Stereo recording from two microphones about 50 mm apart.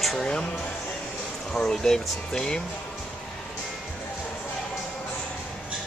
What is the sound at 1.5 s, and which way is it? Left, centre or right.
Speech, centre.